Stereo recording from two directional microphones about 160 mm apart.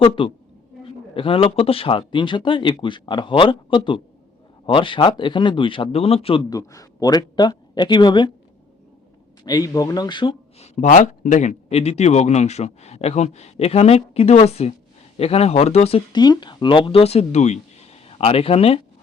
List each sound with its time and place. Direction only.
0.2 s speech: 30° left (ahead or behind)
6.5 s speech: 20° left (ahead or behind)
9.4 s speech: 25° left (ahead or behind)
10.6 s speech: 50° left (ahead or behind)